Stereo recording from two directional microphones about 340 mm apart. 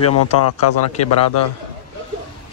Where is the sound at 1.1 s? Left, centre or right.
Left.